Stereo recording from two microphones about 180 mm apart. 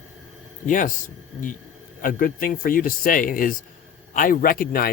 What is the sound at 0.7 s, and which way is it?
Speech, 45° left (ahead or behind).